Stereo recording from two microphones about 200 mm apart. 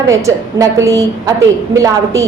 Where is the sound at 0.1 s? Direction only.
15° right (ahead or behind).